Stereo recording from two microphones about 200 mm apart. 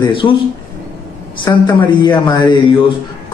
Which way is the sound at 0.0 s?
25° left (ahead or behind).